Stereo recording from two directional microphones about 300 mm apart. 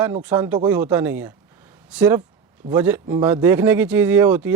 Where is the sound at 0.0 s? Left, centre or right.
Centre.